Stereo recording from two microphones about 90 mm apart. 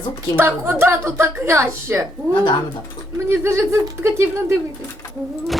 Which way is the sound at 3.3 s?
30° right (ahead or behind).